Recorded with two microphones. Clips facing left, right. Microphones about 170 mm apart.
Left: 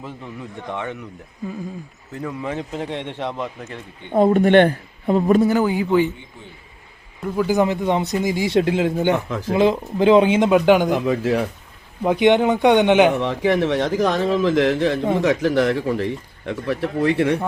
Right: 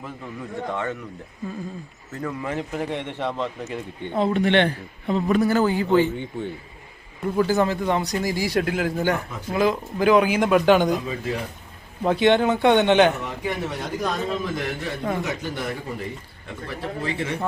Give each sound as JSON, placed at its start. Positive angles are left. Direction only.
{"t": 0.7, "sound": "a man's voice", "side_deg": 15}
{"t": 2.2, "sound": "a man's voice", "side_deg": 15}
{"t": 4.1, "sound": "a man's voice", "side_deg": 50}
{"t": 5.4, "sound": "a man's voice", "side_deg": 15}
{"t": 7.4, "sound": "speech", "side_deg": 15}
{"t": 10.9, "sound": "speech", "side_deg": 75}
{"t": 12.0, "sound": "a man's voice", "side_deg": 15}
{"t": 13.2, "sound": "a man's voice", "side_deg": 90}